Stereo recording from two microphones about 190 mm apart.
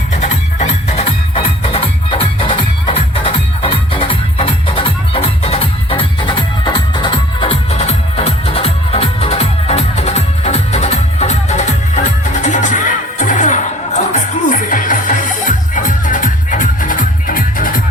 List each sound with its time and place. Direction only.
0.1 s music: 40° left (ahead or behind)